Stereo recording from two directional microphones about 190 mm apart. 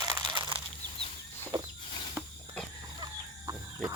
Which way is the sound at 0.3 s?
25° right (ahead or behind).